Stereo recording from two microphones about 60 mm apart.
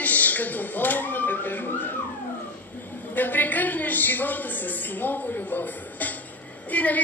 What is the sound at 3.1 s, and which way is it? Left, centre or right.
A woman's voice, left.